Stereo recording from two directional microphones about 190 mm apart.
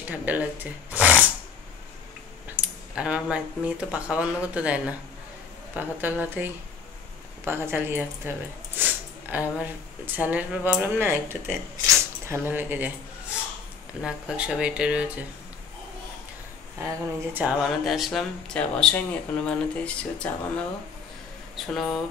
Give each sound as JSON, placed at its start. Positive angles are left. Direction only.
{"t": 0.1, "sound": "speech", "side_deg": -10}
{"t": 2.5, "sound": "speech", "side_deg": -5}
{"t": 8.7, "sound": "a sound", "side_deg": -10}
{"t": 10.1, "sound": "speech", "side_deg": -10}
{"t": 14.0, "sound": "speech", "side_deg": -5}
{"t": 16.8, "sound": "speech", "side_deg": -10}
{"t": 21.7, "sound": "speech", "side_deg": 5}